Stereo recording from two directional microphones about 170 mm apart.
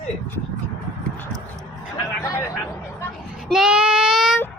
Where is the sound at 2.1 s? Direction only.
15° left (ahead or behind).